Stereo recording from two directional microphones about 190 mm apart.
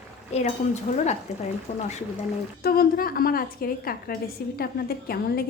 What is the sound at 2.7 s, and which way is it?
A woman's voice, 50° left (ahead or behind).